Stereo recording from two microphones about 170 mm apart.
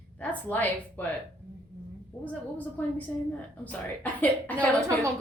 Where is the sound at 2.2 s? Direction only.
10° left (ahead or behind).